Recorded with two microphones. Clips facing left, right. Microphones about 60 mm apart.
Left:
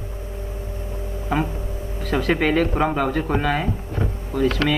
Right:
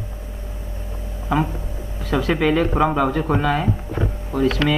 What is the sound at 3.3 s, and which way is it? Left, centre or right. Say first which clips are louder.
Speech: right 2 dB; centre.